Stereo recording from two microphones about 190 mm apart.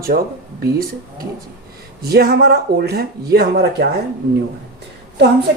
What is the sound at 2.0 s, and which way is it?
Speech, 55° right (ahead or behind).